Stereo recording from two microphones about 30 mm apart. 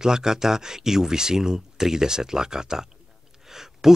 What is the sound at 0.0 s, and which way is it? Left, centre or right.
Speech, right.